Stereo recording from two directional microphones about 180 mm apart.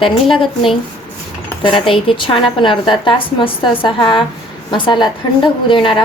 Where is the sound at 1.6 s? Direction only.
30° left (ahead or behind).